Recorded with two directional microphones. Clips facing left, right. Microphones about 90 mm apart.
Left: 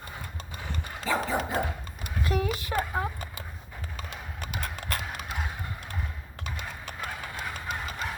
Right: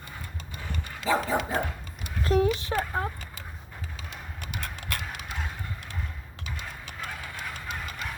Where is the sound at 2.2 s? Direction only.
35° right (ahead or behind).